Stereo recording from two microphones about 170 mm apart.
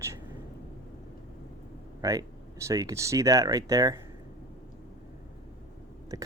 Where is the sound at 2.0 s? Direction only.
20° right (ahead or behind).